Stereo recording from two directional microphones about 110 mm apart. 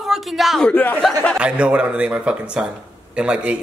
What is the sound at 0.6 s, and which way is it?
Speech, 15° left (ahead or behind).